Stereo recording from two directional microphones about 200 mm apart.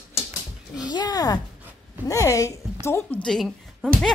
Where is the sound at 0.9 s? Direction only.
20° left (ahead or behind).